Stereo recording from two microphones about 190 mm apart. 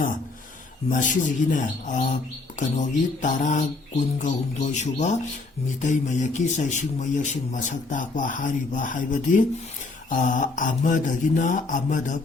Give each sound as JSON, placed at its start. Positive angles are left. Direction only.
{"t": 0.9, "sound": "mantra", "side_deg": 40}
{"t": 2.6, "sound": "a man's voice", "side_deg": 40}
{"t": 10.1, "sound": "mantra", "side_deg": 45}